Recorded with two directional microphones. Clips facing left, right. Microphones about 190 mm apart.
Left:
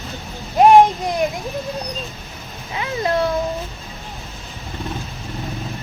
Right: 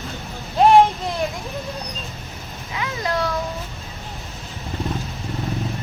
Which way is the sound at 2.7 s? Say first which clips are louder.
Left 4 dB; 25° left (ahead or behind).